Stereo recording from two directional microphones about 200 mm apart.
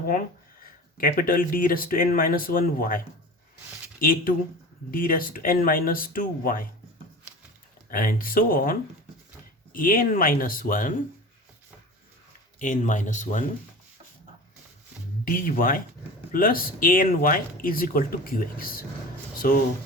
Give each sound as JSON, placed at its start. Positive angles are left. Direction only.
{"t": 0.9, "sound": "speech", "side_deg": 45}
{"t": 4.0, "sound": "speech", "side_deg": 45}
{"t": 7.9, "sound": "speech", "side_deg": 45}
{"t": 12.5, "sound": "speech", "side_deg": 40}
{"t": 15.2, "sound": "speech", "side_deg": 45}